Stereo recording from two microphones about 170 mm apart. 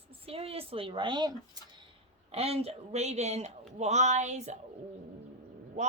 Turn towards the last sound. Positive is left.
turn(degrees=-45)  # may be behind; listen again after turning